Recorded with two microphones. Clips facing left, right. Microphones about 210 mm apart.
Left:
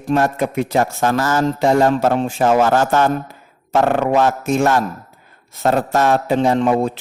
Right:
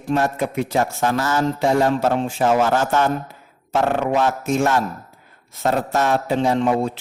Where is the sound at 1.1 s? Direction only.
45° left (ahead or behind).